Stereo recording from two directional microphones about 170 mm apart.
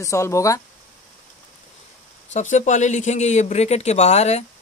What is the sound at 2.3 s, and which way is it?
Speech, 45° left (ahead or behind).